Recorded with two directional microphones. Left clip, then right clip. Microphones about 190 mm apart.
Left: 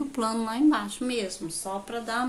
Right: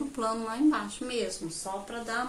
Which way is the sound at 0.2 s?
45° left (ahead or behind).